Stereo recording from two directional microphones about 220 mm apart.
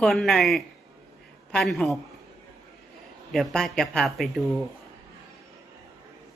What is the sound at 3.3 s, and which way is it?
Speech, centre (ahead or behind).